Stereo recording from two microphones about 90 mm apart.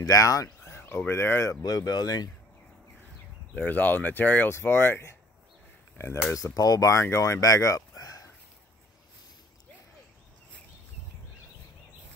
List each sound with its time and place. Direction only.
0.0 s speech: 40° left (ahead or behind)
1.6 s speech: 45° left (ahead or behind)
3.5 s speech: 20° left (ahead or behind)
6.3 s speech: 40° left (ahead or behind)